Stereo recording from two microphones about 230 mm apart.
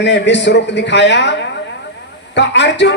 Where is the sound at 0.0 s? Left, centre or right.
Left.